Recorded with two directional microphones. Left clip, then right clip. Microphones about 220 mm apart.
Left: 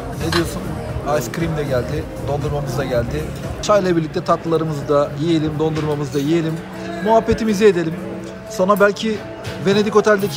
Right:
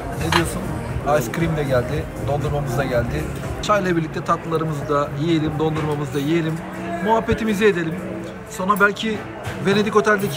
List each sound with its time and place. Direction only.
1.0 s speech: 5° left (ahead or behind)
3.6 s a man's voice: 10° left (ahead or behind)